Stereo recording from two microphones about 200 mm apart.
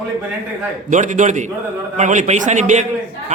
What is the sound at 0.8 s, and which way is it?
Speech, 40° right (ahead or behind).